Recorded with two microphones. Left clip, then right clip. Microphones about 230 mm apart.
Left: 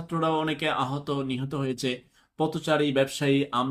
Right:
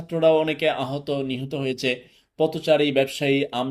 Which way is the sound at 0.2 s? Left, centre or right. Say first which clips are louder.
Right 8 dB; centre.